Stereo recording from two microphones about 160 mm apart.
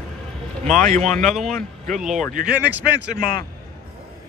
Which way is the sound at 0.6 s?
50° right (ahead or behind).